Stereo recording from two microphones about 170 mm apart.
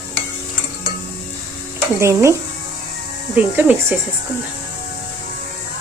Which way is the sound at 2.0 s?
15° right (ahead or behind).